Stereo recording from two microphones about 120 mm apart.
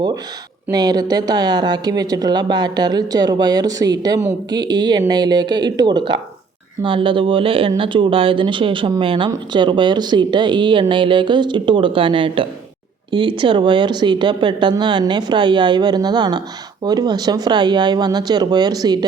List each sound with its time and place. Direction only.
0.7 s speech: 35° right (ahead or behind)